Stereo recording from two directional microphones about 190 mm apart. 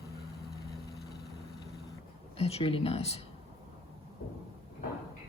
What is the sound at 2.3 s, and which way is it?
Speech, 30° left (ahead or behind).